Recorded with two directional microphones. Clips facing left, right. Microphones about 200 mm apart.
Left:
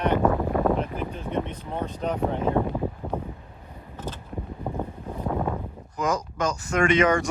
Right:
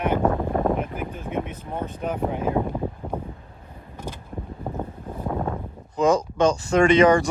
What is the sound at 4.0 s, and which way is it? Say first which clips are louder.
Mechanisms: even; 15° right (ahead or behind).